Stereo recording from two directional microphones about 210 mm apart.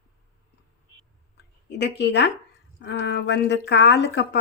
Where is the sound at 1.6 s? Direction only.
55° left (ahead or behind).